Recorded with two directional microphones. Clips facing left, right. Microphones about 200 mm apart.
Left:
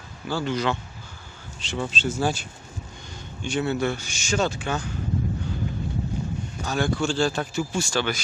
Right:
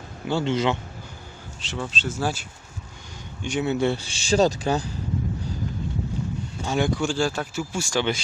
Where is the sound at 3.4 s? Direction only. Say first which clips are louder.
Right 2 dB; 15° right (ahead or behind); by 5.0 s 35° right (ahead or behind).